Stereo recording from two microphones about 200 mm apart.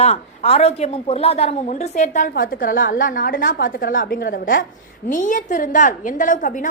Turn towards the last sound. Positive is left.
turn(degrees=40)  # may be behind; listen again after turning